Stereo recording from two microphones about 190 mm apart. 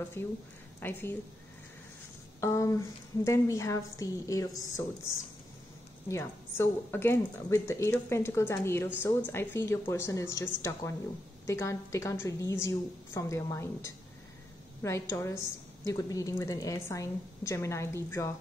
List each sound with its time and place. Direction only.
0.2 s a woman's voice: 10° left (ahead or behind)
2.4 s a woman's voice: 15° left (ahead or behind)
6.0 s a woman's voice: 15° left (ahead or behind)